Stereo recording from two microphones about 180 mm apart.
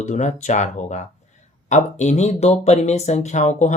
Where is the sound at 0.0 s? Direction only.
40° left (ahead or behind).